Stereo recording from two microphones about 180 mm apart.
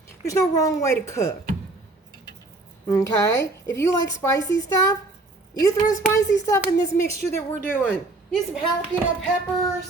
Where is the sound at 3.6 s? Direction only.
15° left (ahead or behind).